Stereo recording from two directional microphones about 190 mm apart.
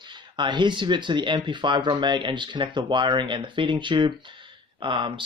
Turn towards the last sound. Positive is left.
turn(degrees=-25)  # may be behind; listen again after turning